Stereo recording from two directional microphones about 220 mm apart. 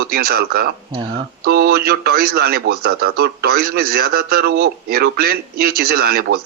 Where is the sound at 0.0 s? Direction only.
45° right (ahead or behind).